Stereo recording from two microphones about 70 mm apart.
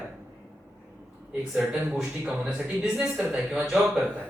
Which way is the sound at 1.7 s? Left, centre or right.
Centre.